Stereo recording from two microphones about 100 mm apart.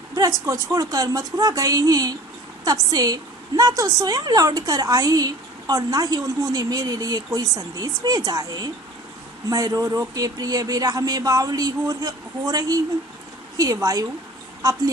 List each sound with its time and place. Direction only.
0.2 s a woman's voice: 30° right (ahead or behind)
13.9 s a woman's voice: 35° right (ahead or behind)